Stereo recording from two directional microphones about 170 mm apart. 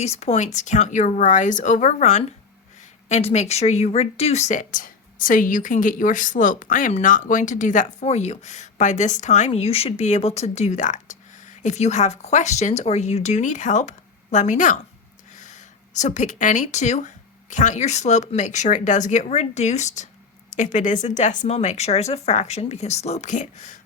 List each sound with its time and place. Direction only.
0.0 s speech: 40° left (ahead or behind)